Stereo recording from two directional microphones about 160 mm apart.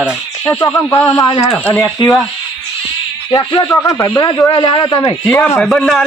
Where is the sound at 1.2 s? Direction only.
30° left (ahead or behind).